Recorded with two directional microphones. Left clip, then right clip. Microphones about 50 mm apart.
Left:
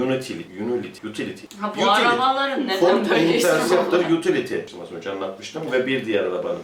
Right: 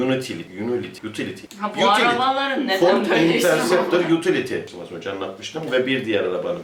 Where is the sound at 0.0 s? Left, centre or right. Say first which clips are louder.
Right 1 dB; centre.